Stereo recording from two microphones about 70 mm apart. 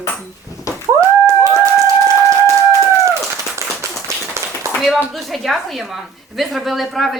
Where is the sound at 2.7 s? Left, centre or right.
Right.